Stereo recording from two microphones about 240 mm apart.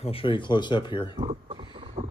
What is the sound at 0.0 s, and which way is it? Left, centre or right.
Speech, left.